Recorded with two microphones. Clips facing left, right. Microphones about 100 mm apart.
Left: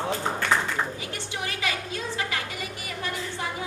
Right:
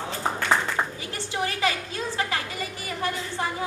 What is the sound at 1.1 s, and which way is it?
Speech, 35° right (ahead or behind).